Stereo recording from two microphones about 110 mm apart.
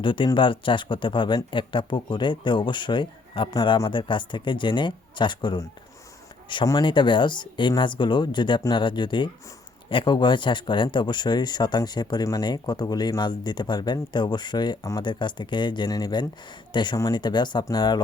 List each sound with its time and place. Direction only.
0.0 s speech: 50° left (ahead or behind)
6.7 s speech: 45° left (ahead or behind)